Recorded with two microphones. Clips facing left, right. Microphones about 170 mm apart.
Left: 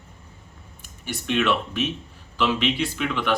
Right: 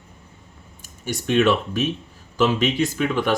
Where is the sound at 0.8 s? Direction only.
45° right (ahead or behind).